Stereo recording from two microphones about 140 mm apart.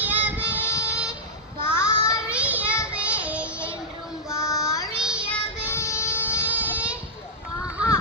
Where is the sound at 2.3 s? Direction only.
10° right (ahead or behind).